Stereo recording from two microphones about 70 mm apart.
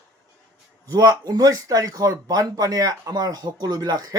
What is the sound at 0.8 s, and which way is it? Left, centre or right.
Speech, right.